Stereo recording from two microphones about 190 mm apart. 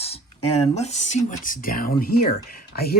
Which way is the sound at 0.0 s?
30° left (ahead or behind).